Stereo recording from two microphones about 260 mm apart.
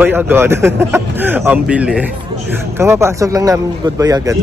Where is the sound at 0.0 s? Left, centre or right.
Centre.